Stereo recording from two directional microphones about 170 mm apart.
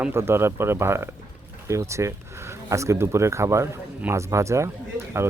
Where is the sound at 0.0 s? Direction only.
15° right (ahead or behind).